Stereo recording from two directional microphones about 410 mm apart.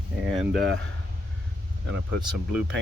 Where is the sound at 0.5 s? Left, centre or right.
Right.